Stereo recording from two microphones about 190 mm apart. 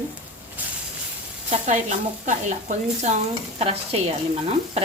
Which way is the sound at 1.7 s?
40° right (ahead or behind).